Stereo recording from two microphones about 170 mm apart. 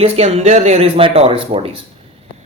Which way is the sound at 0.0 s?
40° right (ahead or behind).